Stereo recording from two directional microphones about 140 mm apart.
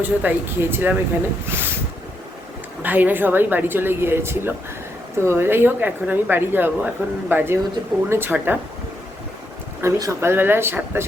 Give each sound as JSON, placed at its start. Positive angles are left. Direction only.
{"t": 0.0, "sound": "a woman's voice", "side_deg": -10}
{"t": 2.8, "sound": "a woman's voice", "side_deg": -10}
{"t": 9.8, "sound": "a woman's voice", "side_deg": -20}